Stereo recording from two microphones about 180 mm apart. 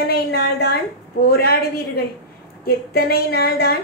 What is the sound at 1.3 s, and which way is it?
A woman's voice, 65° left (ahead or behind).